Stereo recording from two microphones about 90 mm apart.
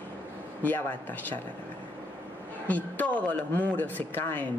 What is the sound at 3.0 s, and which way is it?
Speech, 20° left (ahead or behind).